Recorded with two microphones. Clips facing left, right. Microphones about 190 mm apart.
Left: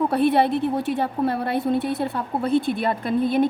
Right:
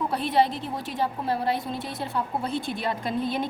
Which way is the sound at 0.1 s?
60° left (ahead or behind).